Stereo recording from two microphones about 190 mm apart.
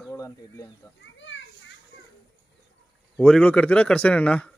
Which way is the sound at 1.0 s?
75° left (ahead or behind).